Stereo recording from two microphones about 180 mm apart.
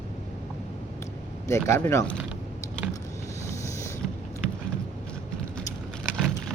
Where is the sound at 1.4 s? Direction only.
15° left (ahead or behind).